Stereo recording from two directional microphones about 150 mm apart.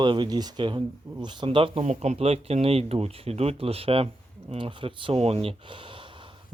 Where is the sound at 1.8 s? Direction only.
50° right (ahead or behind).